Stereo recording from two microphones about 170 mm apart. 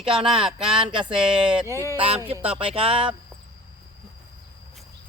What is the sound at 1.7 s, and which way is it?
Speech, 15° left (ahead or behind).